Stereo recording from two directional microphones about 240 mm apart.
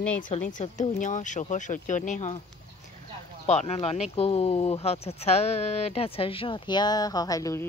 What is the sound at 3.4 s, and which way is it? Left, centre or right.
Speech, left.